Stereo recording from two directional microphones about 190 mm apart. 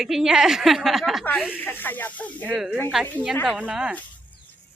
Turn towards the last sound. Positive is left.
turn(degrees=-5)  # may be behind; listen again after turning